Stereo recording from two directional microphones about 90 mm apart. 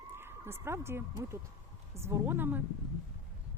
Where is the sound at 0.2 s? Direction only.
25° right (ahead or behind).